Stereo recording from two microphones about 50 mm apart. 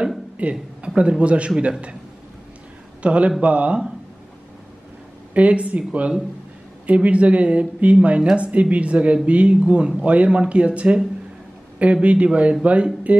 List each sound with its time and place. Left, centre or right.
0.4 s speech: right
3.0 s speech: right
5.3 s speech: right